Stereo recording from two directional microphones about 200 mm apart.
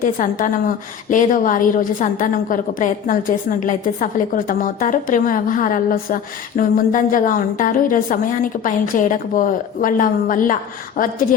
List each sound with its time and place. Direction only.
0.0 s a woman's voice: 40° left (ahead or behind)